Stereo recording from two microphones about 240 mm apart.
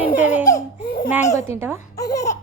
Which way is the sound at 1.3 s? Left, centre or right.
Centre.